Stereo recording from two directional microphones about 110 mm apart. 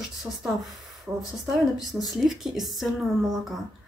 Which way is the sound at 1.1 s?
15° right (ahead or behind).